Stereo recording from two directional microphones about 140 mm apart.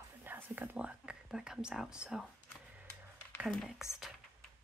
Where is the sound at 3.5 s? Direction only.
Centre (ahead or behind).